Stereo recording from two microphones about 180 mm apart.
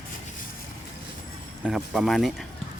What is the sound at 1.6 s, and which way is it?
Speech, centre (ahead or behind).